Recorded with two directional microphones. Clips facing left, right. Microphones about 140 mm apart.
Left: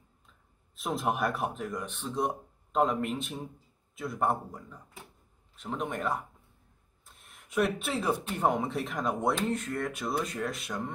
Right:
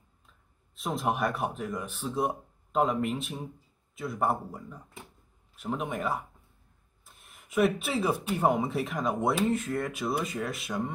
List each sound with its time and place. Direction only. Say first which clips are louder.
0.7 s speech: right 1 dB; centre (ahead or behind)